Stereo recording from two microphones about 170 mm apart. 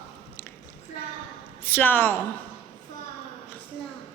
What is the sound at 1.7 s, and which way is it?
Speech, 10° left (ahead or behind).